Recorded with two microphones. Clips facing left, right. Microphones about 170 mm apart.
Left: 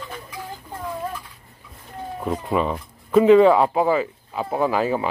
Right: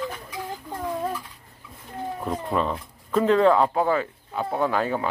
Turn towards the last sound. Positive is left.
turn(degrees=5)  # may be behind; listen again after turning